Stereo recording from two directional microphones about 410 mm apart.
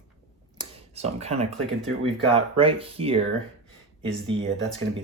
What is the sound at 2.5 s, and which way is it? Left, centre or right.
Speech, centre.